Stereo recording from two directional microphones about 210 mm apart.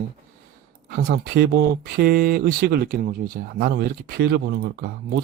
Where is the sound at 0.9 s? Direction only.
50° right (ahead or behind).